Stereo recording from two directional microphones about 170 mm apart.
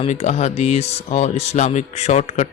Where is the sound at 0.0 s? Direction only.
45° left (ahead or behind).